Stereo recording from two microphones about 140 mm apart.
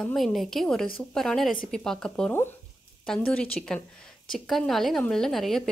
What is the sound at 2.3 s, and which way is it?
Speech, 15° left (ahead or behind).